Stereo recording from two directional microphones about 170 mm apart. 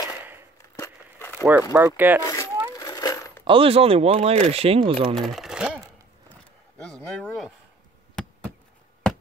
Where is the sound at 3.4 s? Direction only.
30° right (ahead or behind).